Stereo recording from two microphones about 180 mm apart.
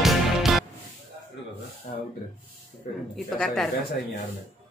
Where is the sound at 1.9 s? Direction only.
45° left (ahead or behind).